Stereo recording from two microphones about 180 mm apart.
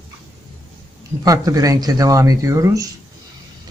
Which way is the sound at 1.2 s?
20° right (ahead or behind).